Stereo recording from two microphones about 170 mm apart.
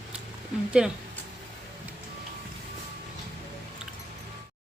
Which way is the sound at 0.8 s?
5° right (ahead or behind).